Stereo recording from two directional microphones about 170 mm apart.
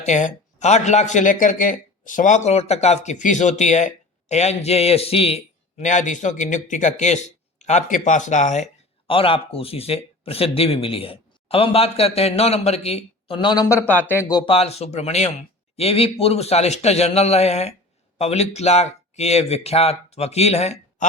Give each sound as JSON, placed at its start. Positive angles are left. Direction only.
{"t": 0.0, "sound": "speech", "side_deg": 45}